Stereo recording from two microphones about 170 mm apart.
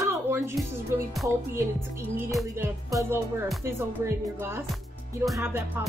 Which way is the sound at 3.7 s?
15° right (ahead or behind).